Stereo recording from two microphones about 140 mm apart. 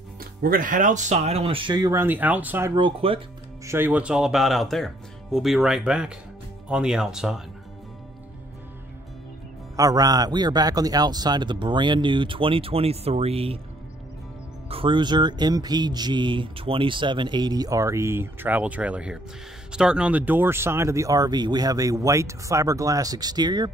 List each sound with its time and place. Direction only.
0.2 s speech: 90° right; by 1.9 s 35° right (ahead or behind)
1.9 s speech: 15° right (ahead or behind)
2.7 s speech: 40° right (ahead or behind)
3.6 s speech: 15° right (ahead or behind)
9.8 s speech: 25° right (ahead or behind); by 13.6 s 45° right (ahead or behind)
14.7 s speech: 40° right (ahead or behind)